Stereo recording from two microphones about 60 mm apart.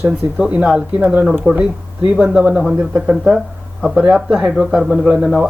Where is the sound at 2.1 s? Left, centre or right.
Centre.